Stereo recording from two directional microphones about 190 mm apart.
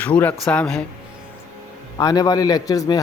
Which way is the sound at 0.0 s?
10° left (ahead or behind).